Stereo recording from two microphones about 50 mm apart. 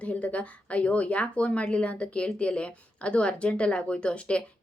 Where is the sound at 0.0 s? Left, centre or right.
Left.